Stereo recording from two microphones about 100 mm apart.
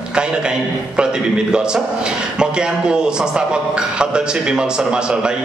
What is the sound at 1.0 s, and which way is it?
A man's voice, 10° right (ahead or behind).